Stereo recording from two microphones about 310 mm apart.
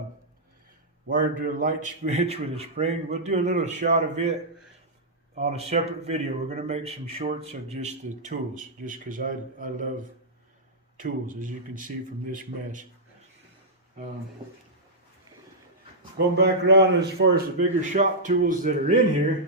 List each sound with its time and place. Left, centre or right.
1.0 s a man's voice: right
10.9 s a man's voice: right
16.1 s a man's voice: right